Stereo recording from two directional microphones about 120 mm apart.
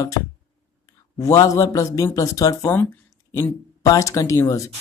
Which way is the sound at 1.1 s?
30° left (ahead or behind).